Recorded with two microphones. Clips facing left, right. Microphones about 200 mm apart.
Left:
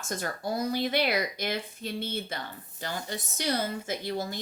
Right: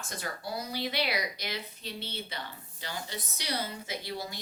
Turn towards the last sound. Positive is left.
turn(degrees=50)  # may be behind; listen again after turning